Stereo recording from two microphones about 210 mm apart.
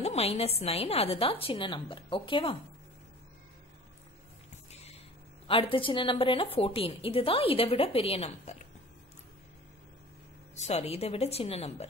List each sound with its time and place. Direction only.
0.0 s a woman's voice: 30° left (ahead or behind)
5.5 s a woman's voice: 25° left (ahead or behind)
10.5 s a woman's voice: 30° left (ahead or behind)